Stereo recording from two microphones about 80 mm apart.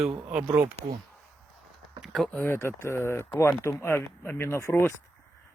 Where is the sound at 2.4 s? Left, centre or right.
Left.